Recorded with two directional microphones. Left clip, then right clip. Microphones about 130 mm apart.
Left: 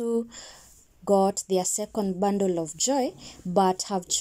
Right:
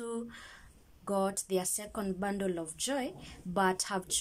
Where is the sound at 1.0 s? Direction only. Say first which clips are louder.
Left 11 dB; 40° left (ahead or behind).